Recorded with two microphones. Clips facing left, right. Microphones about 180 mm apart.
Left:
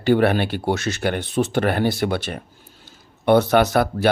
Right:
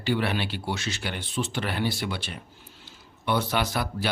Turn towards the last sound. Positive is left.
turn(degrees=50)  # may be behind; listen again after turning